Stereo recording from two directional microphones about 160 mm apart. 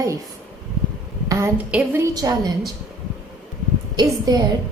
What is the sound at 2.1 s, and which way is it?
Speech, 25° right (ahead or behind).